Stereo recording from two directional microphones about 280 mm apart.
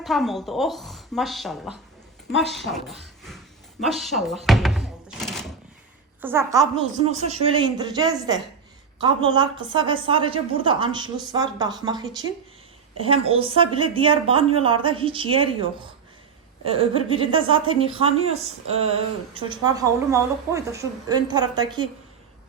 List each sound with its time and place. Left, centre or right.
0.0 s a woman's voice: centre
4.4 s thunk: centre
6.2 s a woman's voice: centre